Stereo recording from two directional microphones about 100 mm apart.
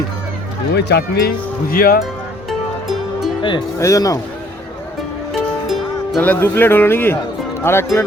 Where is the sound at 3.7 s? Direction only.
35° left (ahead or behind).